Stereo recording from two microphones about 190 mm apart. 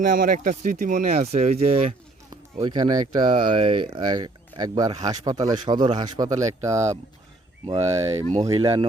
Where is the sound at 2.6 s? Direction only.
25° right (ahead or behind).